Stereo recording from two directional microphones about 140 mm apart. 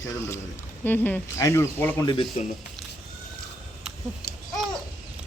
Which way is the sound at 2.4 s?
55° left (ahead or behind).